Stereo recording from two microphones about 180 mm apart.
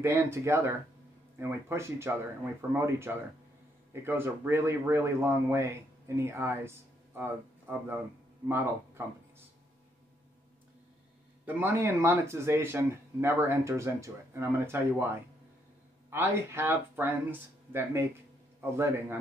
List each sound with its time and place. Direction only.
0.0 s speech: 15° right (ahead or behind)
11.4 s speech: 15° right (ahead or behind)
16.1 s speech: 15° right (ahead or behind)